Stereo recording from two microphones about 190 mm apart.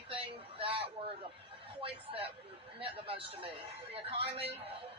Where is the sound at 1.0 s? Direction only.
30° right (ahead or behind).